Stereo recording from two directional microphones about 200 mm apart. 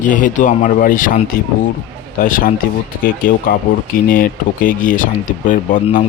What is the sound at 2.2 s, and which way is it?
Speech, 45° left (ahead or behind).